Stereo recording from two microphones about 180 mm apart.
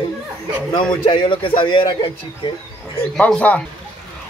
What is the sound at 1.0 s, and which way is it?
A man's voice, 30° left (ahead or behind).